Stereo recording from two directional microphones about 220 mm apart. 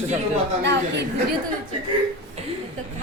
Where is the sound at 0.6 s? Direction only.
50° right (ahead or behind).